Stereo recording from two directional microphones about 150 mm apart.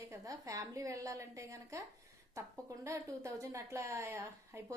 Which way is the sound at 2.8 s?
20° right (ahead or behind).